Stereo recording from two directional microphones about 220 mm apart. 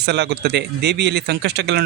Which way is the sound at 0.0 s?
50° right (ahead or behind).